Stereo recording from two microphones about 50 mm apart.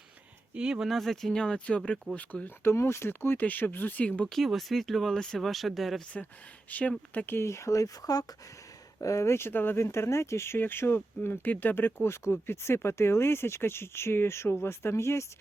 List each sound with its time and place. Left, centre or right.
0.5 s speech: centre
0.9 s speech: centre; by 2.5 s left
2.7 s speech: left
3.3 s speech: left
4.3 s speech: centre
5.5 s speech: centre
6.7 s speech: left
7.4 s speech: left
9.0 s speech: left
9.5 s speech: left
9.7 s speech: left
10.6 s speech: left
12.0 s speech: left